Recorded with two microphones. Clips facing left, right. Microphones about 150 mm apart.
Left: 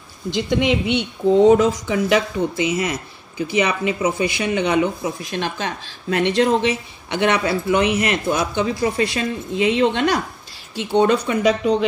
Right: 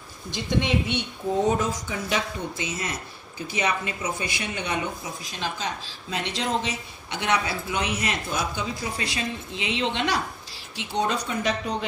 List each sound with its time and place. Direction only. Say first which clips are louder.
0.3 s speech: left 6 dB; 90° left; by 2.7 s 75° left (ahead or behind)
3.5 s speech: left 7 dB; 90° left